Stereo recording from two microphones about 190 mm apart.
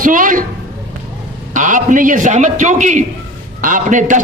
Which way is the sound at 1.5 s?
40° right (ahead or behind).